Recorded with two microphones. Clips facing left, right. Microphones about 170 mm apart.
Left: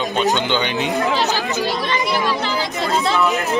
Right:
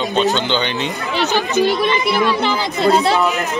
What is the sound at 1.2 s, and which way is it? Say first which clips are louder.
Speech: right 4 dB; 65° right (ahead or behind).